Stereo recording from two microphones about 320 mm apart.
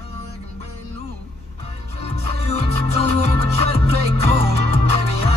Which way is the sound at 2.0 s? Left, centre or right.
Centre.